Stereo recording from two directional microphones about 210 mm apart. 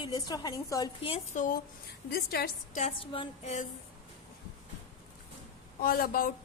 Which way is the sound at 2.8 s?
30° left (ahead or behind).